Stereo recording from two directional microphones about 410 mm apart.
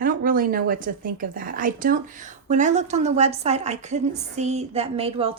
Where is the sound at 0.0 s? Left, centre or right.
Centre.